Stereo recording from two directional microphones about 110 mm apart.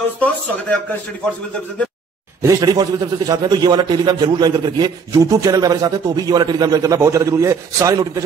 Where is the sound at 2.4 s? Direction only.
35° right (ahead or behind).